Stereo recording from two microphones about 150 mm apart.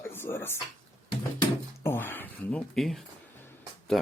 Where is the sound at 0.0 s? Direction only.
15° left (ahead or behind).